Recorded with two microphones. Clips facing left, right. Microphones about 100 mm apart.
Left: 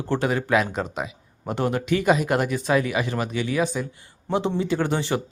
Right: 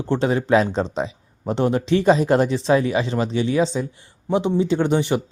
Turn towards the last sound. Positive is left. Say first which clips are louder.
# right 4 dB
turn(degrees=-20)  # may be behind; listen again after turning